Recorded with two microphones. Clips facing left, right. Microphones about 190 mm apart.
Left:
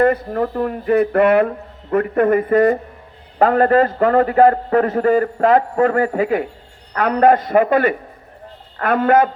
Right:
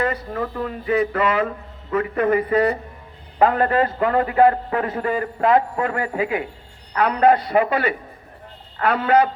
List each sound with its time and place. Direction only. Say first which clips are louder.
0.0 s a man's voice: left 8 dB; 55° left (ahead or behind)